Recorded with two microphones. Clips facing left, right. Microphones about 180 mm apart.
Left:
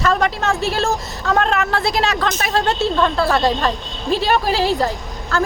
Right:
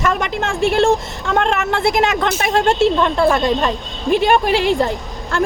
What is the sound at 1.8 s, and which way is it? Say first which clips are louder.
A woman's voice: right 3 dB; 20° right (ahead or behind).